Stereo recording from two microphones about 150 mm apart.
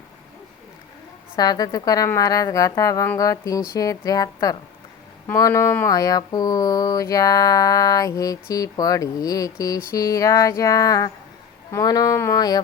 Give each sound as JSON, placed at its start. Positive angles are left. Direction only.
{"t": 1.4, "sound": "mantra", "side_deg": 25}